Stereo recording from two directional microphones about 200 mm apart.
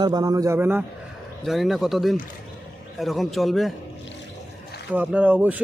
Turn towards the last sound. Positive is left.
turn(degrees=-5)  # may be behind; listen again after turning